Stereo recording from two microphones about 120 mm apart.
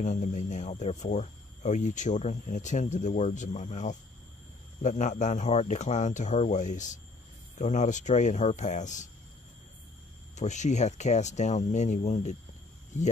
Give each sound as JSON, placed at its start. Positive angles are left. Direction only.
{"t": 0.0, "sound": "speech", "side_deg": 90}
{"t": 7.5, "sound": "speech", "side_deg": 75}
{"t": 10.3, "sound": "speech", "side_deg": 80}